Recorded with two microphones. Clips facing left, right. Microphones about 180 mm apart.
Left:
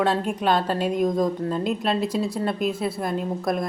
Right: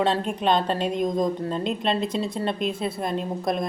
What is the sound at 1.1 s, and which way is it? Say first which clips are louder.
Speech: left 1 dB; 20° right (ahead or behind).